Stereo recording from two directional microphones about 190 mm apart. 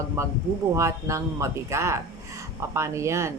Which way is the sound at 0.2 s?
15° right (ahead or behind).